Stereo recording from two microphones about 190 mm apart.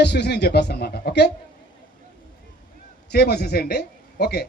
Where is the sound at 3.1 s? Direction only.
55° left (ahead or behind).